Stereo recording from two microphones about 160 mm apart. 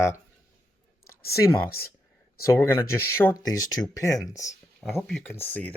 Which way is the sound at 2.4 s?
15° left (ahead or behind).